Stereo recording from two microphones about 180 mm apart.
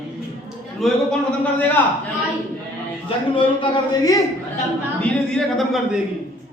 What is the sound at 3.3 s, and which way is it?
Speech, 25° left (ahead or behind).